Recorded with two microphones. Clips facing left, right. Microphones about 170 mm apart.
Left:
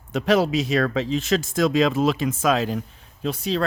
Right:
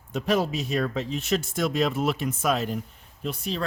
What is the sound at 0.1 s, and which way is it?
Speech, 90° left.